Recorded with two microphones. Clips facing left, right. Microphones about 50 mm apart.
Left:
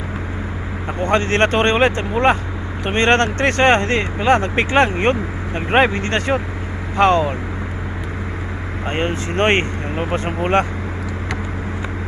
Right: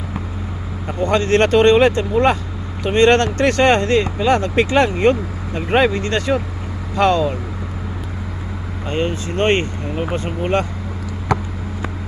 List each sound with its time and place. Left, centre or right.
1.0 s speech: left
8.9 s speech: left